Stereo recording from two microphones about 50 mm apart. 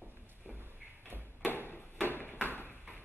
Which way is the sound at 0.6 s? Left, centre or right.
Right.